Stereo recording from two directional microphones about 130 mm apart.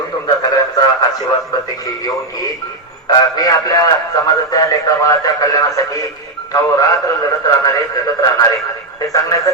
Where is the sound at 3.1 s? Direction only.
30° left (ahead or behind).